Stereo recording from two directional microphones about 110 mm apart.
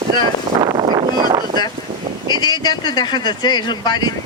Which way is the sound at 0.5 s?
40° right (ahead or behind).